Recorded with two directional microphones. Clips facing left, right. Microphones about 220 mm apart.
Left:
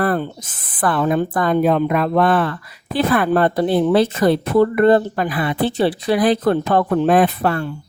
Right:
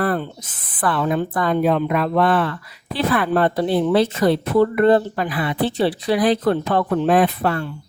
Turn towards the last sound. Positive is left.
turn(degrees=50)  # may be behind; listen again after turning